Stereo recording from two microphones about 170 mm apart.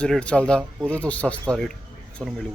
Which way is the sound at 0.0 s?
5° left (ahead or behind).